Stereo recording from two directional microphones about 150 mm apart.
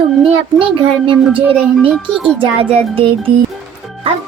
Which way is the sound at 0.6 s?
35° right (ahead or behind).